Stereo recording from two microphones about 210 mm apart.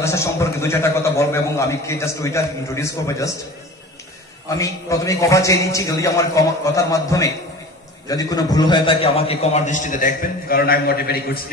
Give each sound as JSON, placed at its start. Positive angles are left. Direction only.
{"t": 0.0, "sound": "a man's voice", "side_deg": 15}
{"t": 4.5, "sound": "a man's voice", "side_deg": 15}